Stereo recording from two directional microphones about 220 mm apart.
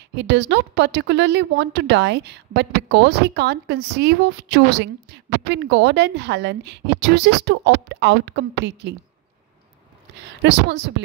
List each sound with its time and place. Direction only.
0.1 s speech: 50° right (ahead or behind)
10.4 s speech: 50° right (ahead or behind)